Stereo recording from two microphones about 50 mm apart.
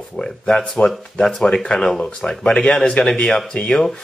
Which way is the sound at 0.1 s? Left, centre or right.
Centre.